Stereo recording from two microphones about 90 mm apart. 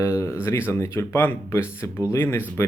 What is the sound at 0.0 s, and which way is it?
Speech, 35° left (ahead or behind).